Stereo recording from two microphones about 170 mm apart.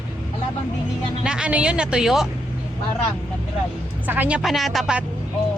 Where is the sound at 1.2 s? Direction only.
5° right (ahead or behind).